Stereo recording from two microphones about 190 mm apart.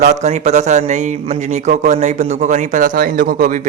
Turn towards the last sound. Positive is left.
turn(degrees=-40)  # may be behind; listen again after turning